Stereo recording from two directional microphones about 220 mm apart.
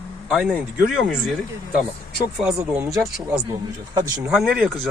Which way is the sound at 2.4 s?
5° right (ahead or behind).